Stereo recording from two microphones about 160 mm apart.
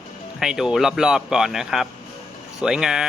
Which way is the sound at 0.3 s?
Centre (ahead or behind).